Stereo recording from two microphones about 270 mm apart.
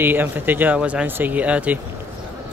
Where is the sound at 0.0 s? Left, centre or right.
Centre.